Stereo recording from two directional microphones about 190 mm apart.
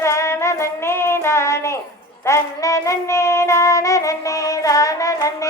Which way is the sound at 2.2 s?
15° left (ahead or behind).